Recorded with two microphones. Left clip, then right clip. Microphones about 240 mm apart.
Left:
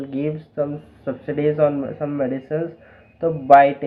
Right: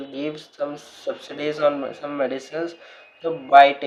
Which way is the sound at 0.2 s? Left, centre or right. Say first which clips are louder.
Left 4 dB; right.